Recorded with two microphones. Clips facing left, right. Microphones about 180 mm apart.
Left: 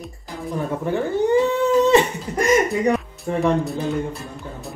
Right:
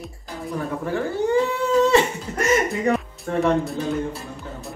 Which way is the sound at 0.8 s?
20° left (ahead or behind).